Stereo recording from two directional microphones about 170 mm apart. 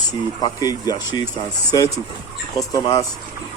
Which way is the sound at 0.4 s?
20° left (ahead or behind).